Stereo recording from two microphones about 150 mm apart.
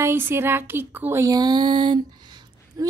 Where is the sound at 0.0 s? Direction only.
15° right (ahead or behind).